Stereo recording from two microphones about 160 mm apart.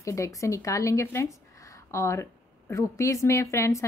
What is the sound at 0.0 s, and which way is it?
A woman's voice, 20° left (ahead or behind).